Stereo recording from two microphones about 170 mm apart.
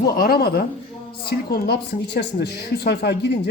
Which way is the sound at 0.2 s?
65° left (ahead or behind).